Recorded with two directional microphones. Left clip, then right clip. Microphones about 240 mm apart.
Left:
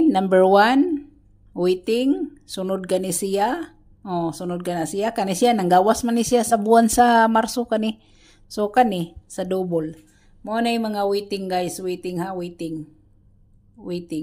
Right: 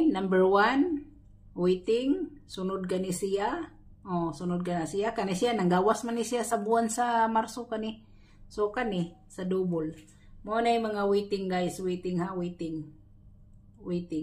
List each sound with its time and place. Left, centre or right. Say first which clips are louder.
0.1 s speech: left 9 dB; left
13.8 s a woman's voice: left 5 dB; left